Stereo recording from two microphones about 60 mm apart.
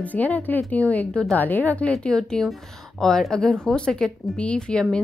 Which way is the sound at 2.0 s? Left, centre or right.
Centre.